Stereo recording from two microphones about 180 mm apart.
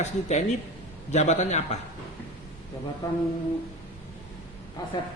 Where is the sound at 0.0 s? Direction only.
40° left (ahead or behind).